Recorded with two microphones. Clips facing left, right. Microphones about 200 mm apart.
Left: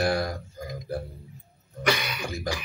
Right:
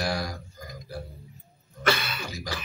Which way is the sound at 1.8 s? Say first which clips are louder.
Even; 15° left (ahead or behind).